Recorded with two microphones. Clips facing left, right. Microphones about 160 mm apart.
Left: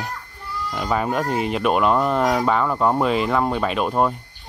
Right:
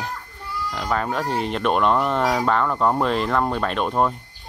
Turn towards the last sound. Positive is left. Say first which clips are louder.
# left 1 dB
turn(degrees=5)  # may be behind; listen again after turning